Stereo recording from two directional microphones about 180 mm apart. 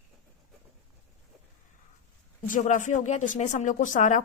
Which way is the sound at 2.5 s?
45° left (ahead or behind).